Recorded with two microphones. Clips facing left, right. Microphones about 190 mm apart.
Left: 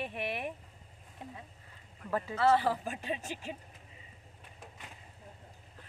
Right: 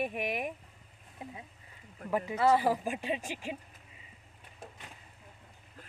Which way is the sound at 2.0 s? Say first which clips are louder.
Right 1 dB; 15° right (ahead or behind).